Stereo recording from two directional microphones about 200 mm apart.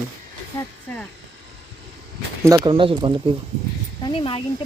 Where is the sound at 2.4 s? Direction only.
20° right (ahead or behind).